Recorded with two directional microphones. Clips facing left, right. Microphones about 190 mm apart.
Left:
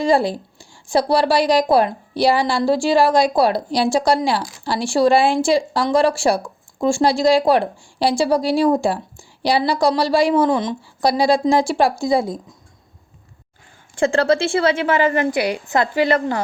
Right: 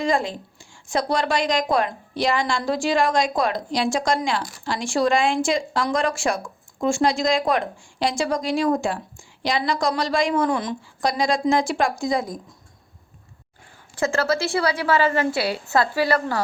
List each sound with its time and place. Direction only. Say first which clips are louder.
0.0 s a woman's voice: left 6 dB; 35° left (ahead or behind)
13.9 s a woman's voice: left 6 dB; 30° left (ahead or behind)